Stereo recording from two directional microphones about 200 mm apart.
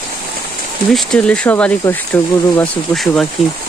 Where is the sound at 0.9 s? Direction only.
5° left (ahead or behind).